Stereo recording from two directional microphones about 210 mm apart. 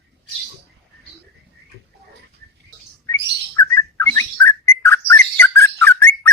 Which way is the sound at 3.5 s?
15° left (ahead or behind).